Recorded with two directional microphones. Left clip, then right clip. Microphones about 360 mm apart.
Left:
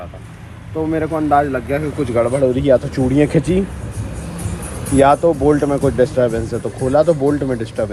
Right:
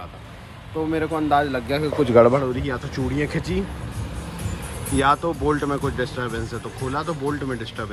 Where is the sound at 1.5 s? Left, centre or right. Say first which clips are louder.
Left 4 dB; centre.